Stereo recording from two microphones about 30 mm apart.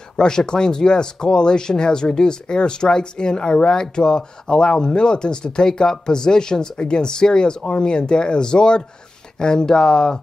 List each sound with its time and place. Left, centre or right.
0.2 s speech: left